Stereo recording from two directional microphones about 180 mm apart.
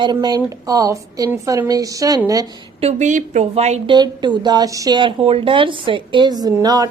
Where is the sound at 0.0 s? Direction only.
20° right (ahead or behind).